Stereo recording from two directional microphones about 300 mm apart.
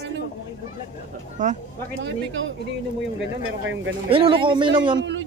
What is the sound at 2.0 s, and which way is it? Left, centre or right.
Speech, right.